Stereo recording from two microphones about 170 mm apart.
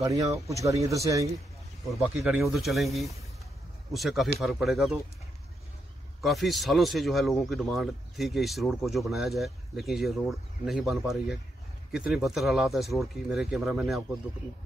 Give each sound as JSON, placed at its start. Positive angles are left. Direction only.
{"t": 0.0, "sound": "speech", "side_deg": -20}
{"t": 1.9, "sound": "speech", "side_deg": -5}
{"t": 6.2, "sound": "speech", "side_deg": 0}